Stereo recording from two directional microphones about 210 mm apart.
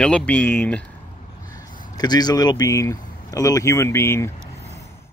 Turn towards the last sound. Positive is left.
turn(degrees=10)  # may be behind; listen again after turning